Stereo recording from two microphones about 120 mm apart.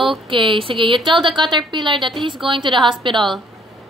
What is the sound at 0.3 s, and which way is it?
A woman's voice, 45° right (ahead or behind).